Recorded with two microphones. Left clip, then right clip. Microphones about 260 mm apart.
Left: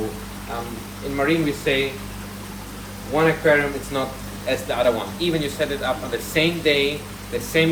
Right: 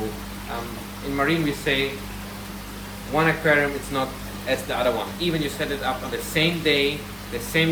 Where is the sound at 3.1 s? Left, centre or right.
Centre.